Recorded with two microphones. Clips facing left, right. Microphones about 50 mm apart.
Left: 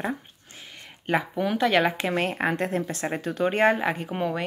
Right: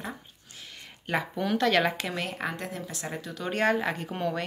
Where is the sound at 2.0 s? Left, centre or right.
Left.